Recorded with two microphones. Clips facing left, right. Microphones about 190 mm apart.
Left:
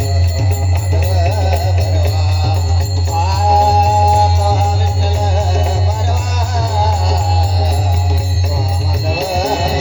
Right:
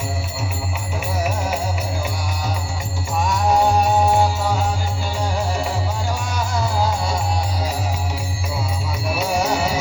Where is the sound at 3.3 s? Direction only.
35° left (ahead or behind).